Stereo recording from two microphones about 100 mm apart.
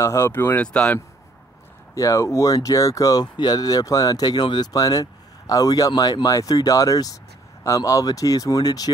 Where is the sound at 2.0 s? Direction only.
35° left (ahead or behind).